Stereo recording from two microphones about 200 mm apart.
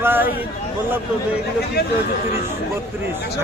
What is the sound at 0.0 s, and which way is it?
Speech, 10° right (ahead or behind).